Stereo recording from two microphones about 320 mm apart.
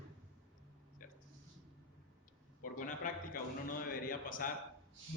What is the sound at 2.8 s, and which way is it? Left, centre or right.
A man's voice, left.